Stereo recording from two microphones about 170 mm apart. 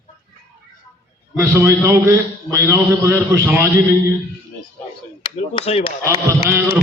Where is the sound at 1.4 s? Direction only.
15° right (ahead or behind).